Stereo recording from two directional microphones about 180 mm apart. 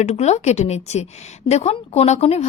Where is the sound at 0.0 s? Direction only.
40° left (ahead or behind).